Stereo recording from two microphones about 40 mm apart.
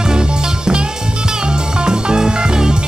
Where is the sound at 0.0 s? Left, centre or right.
Centre.